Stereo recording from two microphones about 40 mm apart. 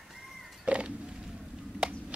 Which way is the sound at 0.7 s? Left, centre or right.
Right.